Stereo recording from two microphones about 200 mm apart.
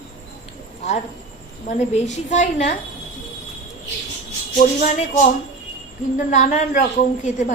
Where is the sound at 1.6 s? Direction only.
35° left (ahead or behind).